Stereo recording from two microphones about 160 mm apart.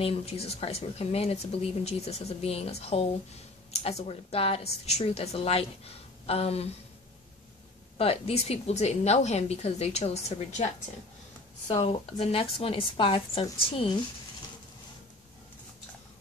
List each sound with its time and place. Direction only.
0.0 s speech: 40° left (ahead or behind)
8.0 s speech: 40° left (ahead or behind)
11.6 s speech: 35° left (ahead or behind)